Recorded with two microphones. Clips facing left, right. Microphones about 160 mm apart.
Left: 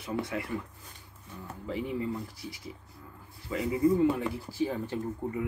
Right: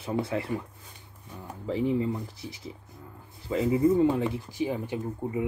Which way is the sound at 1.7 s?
30° right (ahead or behind).